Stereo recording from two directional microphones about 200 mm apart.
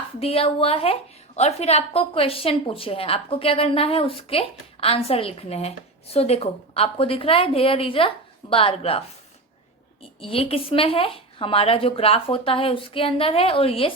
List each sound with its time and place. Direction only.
0.2 s a woman's voice: 30° left (ahead or behind)
10.2 s a woman's voice: 30° left (ahead or behind)